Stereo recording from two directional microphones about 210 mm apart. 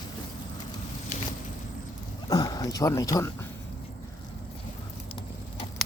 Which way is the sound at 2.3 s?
20° left (ahead or behind).